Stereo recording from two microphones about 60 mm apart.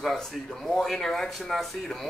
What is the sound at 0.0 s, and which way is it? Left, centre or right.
A man's voice, centre.